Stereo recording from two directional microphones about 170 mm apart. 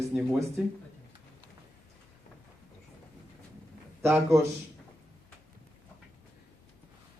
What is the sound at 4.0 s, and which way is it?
Speech, 15° right (ahead or behind).